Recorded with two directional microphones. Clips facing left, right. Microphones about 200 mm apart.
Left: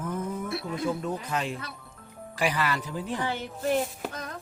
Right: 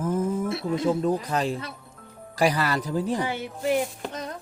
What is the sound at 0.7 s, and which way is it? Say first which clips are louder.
Speech: right 7 dB; 25° right (ahead or behind).